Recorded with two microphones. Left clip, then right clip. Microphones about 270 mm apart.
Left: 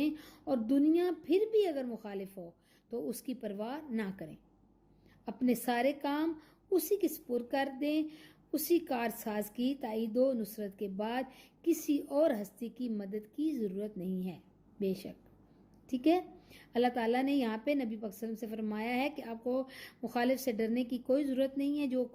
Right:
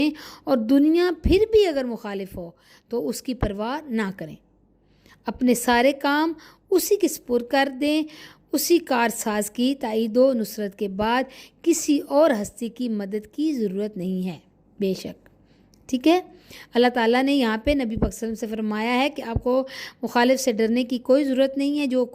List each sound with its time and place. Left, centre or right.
0.0 s a woman's voice: right